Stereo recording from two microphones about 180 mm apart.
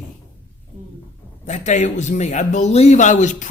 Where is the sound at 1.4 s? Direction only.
40° left (ahead or behind).